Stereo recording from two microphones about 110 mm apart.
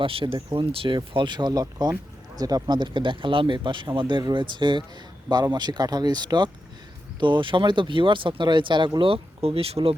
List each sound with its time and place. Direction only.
0.0 s speech: 55° right (ahead or behind)
9.0 s speech: 55° right (ahead or behind)